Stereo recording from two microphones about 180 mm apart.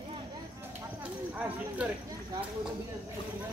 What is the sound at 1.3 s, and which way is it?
Speech, 5° right (ahead or behind).